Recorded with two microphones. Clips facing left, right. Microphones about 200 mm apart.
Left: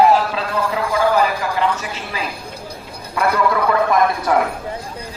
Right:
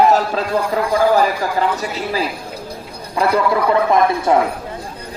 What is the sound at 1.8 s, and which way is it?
Speech, 35° right (ahead or behind).